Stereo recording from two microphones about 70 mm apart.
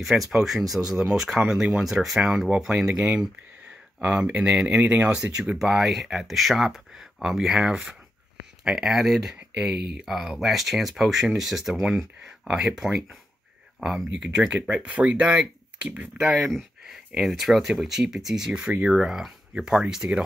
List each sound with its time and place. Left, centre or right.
0.0 s speech: centre
16.3 s speech: centre
18.9 s speech: centre